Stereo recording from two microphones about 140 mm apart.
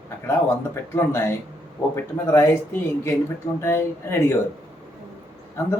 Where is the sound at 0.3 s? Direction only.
20° left (ahead or behind).